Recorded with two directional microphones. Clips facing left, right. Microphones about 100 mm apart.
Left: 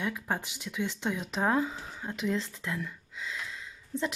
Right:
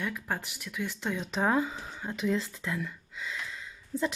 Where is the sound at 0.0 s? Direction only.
15° left (ahead or behind).